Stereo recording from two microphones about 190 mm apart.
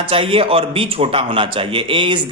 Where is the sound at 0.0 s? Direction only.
30° right (ahead or behind).